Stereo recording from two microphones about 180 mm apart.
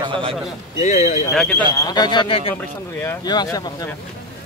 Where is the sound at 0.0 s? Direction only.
30° right (ahead or behind).